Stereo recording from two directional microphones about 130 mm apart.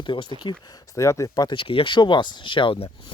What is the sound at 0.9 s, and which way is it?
Speech, 25° left (ahead or behind).